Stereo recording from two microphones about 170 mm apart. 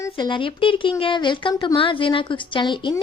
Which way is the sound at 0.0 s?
25° left (ahead or behind).